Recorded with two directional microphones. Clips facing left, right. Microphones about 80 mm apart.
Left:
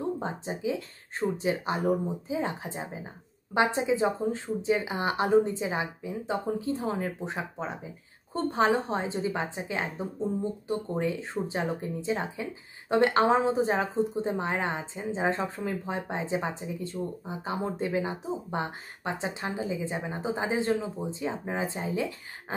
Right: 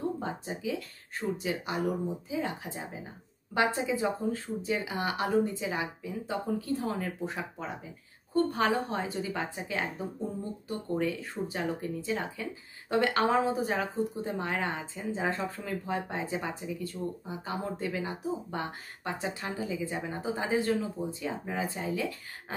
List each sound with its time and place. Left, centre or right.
0.2 s speech: left